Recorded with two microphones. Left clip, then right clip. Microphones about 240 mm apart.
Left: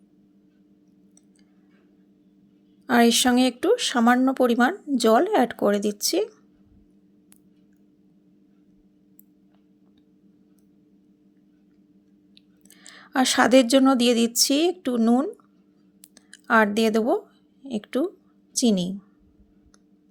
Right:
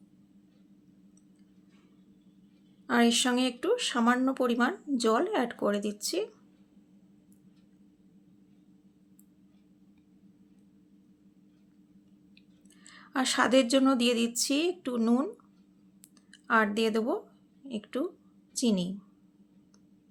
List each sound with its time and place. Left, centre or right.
2.8 s speech: left
12.3 s speech: left